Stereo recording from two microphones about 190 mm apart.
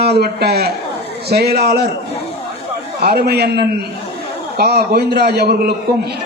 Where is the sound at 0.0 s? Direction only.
55° right (ahead or behind).